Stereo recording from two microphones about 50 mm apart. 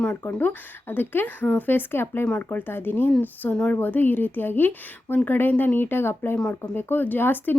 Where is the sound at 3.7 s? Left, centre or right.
Left.